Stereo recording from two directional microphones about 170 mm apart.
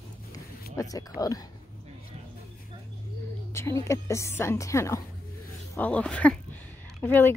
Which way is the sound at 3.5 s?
15° left (ahead or behind).